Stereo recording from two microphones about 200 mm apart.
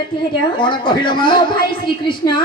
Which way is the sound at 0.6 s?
25° left (ahead or behind).